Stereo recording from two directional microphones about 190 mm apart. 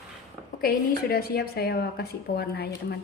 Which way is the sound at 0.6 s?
55° left (ahead or behind).